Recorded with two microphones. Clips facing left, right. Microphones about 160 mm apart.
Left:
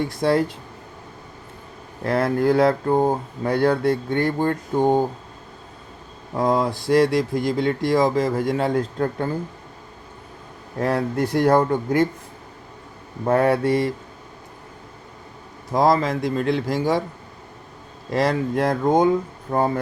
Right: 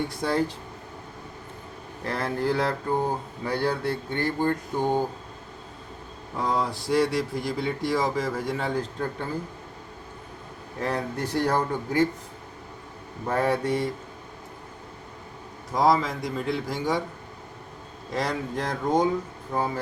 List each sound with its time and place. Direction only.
0.2 s speech: 65° left (ahead or behind)
2.0 s speech: 65° left (ahead or behind)
6.4 s speech: 50° left (ahead or behind)
6.8 s speech: 70° left (ahead or behind)
10.8 s speech: 70° left (ahead or behind)
13.2 s speech: 65° left (ahead or behind)
16.0 s a man's voice: 80° left
18.1 s speech: 70° left (ahead or behind)